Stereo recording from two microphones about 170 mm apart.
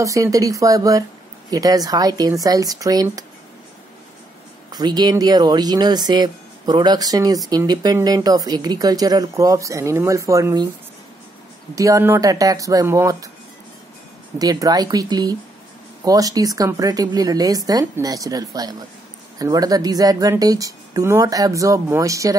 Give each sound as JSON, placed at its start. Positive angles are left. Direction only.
{"t": 0.0, "sound": "speech", "side_deg": -20}
{"t": 4.6, "sound": "speech", "side_deg": -25}
{"t": 11.7, "sound": "speech", "side_deg": -20}
{"t": 14.4, "sound": "speech", "side_deg": -20}